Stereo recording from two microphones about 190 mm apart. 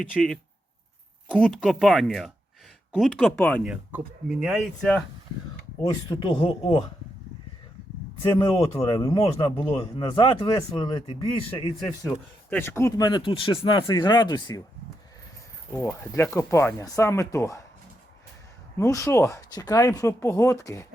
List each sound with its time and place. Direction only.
0.1 s speech: centre (ahead or behind)
1.4 s speech: centre (ahead or behind)
3.6 s speech: 5° right (ahead or behind)
6.1 s speech: 30° left (ahead or behind)
8.2 s speech: 25° left (ahead or behind)
12.0 s speech: 10° left (ahead or behind)
15.9 s speech: 10° left (ahead or behind)
18.8 s speech: 15° left (ahead or behind)